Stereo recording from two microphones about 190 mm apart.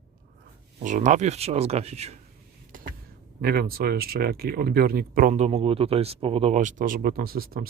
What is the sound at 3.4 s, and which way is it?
Speech, 55° right (ahead or behind).